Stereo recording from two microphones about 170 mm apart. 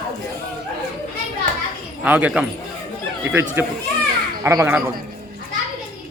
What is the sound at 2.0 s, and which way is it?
Speech, 10° right (ahead or behind).